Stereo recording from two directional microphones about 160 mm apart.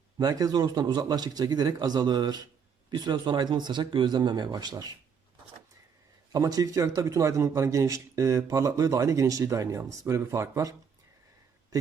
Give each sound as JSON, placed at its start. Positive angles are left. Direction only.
{"t": 0.2, "sound": "a man's voice", "side_deg": -25}
{"t": 6.3, "sound": "a man's voice", "side_deg": -25}